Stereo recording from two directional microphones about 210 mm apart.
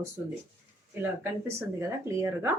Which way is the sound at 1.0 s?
10° right (ahead or behind).